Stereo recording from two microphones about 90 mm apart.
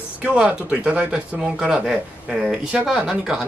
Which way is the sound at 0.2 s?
15° right (ahead or behind).